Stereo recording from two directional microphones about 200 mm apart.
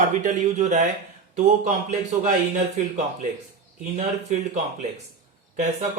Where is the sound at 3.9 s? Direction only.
35° right (ahead or behind).